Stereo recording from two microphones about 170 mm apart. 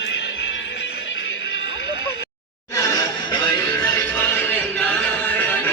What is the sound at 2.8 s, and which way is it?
Music, 25° left (ahead or behind).